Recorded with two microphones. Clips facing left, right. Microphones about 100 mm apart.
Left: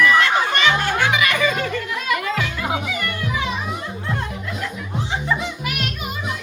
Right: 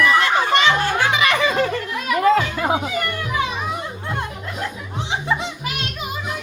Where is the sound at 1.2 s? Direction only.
30° right (ahead or behind).